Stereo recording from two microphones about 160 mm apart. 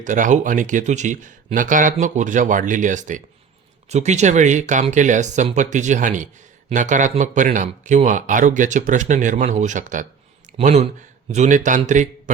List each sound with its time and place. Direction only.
0.0 s speech: 50° right (ahead or behind)